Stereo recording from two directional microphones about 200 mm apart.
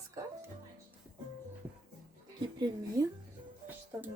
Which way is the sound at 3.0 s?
15° right (ahead or behind).